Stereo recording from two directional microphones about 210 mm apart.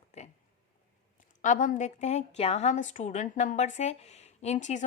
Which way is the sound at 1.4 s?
35° left (ahead or behind).